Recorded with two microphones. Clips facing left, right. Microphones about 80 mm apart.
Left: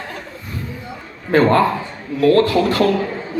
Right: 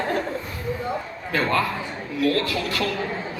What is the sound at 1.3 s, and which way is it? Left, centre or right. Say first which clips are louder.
Speech: left 9 dB; left.